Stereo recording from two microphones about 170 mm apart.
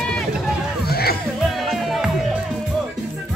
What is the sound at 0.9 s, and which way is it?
Music, 65° left (ahead or behind).